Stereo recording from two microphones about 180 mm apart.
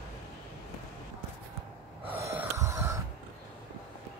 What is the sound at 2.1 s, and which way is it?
Snort, 10° right (ahead or behind).